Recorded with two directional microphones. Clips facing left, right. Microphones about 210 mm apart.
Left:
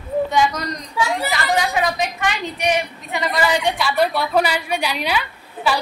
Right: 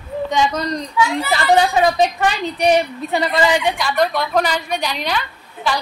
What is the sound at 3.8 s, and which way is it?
A woman's voice, 10° left (ahead or behind).